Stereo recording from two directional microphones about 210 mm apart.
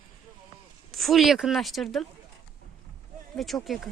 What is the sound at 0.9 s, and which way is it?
Speech, centre (ahead or behind).